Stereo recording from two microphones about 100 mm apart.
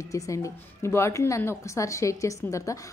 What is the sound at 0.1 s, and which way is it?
A woman's voice, 30° left (ahead or behind).